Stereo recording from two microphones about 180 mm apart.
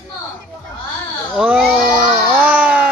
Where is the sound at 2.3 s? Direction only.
10° right (ahead or behind).